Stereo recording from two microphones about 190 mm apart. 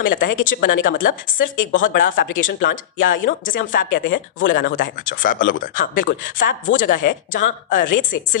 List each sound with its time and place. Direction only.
0.0 s speech: 45° left (ahead or behind)